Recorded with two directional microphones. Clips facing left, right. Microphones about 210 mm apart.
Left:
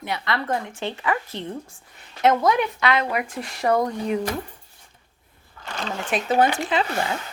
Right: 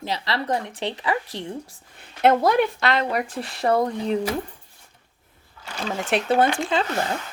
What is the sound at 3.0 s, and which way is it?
Speech, 35° right (ahead or behind).